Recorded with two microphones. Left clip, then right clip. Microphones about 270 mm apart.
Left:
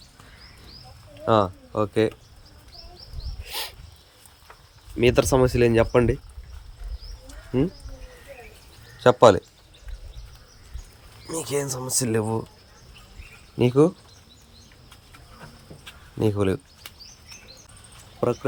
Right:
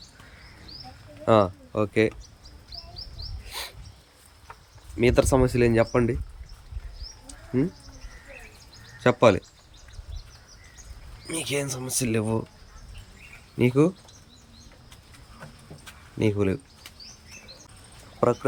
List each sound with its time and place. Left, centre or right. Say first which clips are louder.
1.2 s speech: even; centre
3.4 s dog: left 5 dB; centre
4.9 s speech: left 2 dB; centre
9.0 s speech: left 4 dB; centre
11.3 s speech: left 2 dB; centre
13.6 s speech: left 3 dB; centre
15.8 s a sound: left 1 dB; centre
18.2 s speech: right 2 dB; centre